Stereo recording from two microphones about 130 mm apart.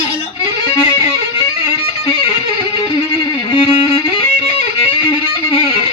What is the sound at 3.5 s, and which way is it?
Music, 60° left (ahead or behind).